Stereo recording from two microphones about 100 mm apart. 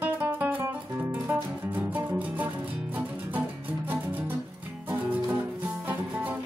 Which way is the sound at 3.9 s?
20° right (ahead or behind).